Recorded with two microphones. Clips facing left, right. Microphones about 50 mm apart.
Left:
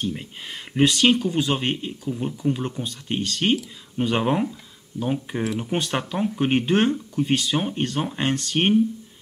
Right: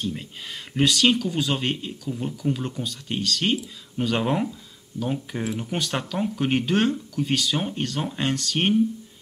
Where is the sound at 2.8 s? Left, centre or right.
Left.